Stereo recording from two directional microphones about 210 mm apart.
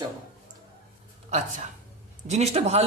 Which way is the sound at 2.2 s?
30° right (ahead or behind).